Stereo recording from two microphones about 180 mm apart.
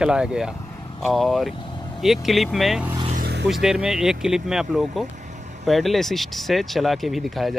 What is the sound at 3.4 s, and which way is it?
Speech, centre (ahead or behind).